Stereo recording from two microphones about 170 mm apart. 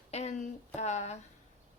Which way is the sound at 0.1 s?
40° left (ahead or behind).